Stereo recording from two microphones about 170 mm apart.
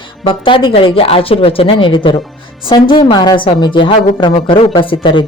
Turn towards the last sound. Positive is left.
turn(degrees=30)  # may be behind; listen again after turning